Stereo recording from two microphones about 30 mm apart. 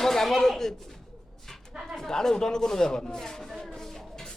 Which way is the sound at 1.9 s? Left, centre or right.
Centre.